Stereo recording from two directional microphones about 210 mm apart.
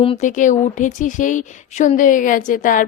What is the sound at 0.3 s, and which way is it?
A woman's voice, 35° left (ahead or behind).